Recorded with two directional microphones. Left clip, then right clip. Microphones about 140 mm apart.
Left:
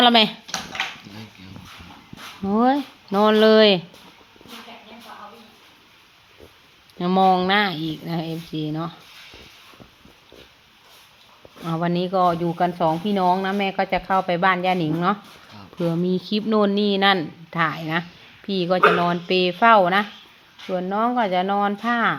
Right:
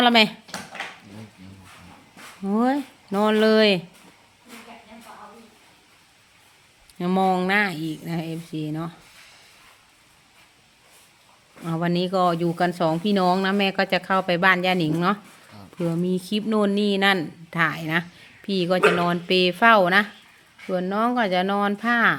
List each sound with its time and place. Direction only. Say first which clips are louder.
0.0 s speech: left 2 dB; 10° right (ahead or behind)
2.4 s speech: left 4 dB; 10° right (ahead or behind)
7.0 s speech: left 4 dB; 10° right (ahead or behind)
11.6 s speech: left 1 dB; 20° right (ahead or behind)
15.8 s speech: left 2 dB; 10° right (ahead or behind); by 22.1 s 30° right (ahead or behind)